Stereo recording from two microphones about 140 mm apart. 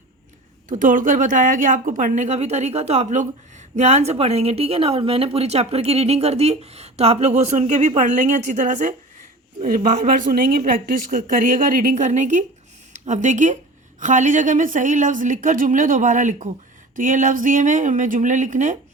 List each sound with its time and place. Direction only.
0.7 s a woman's voice: 70° right (ahead or behind)
9.6 s a woman's voice: 85° right; by 18.8 s 65° right (ahead or behind)